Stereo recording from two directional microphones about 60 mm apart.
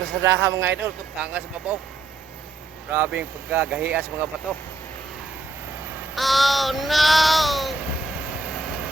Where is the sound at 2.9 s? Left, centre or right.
Right.